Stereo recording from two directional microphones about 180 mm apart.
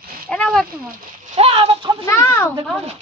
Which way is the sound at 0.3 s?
5° left (ahead or behind).